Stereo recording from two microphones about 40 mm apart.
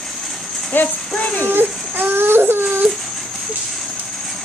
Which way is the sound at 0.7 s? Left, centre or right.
Left.